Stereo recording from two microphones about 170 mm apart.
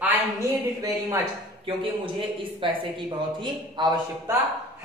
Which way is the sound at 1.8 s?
30° right (ahead or behind).